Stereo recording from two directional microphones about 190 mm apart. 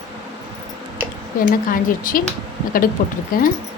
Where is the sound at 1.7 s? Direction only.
45° left (ahead or behind).